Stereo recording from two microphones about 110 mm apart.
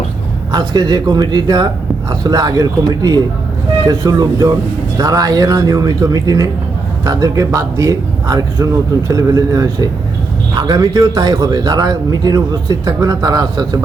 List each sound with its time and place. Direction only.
0.5 s a man's voice: 40° right (ahead or behind)